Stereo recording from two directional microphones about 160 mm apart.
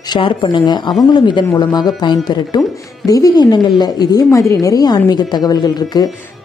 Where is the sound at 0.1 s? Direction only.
30° left (ahead or behind).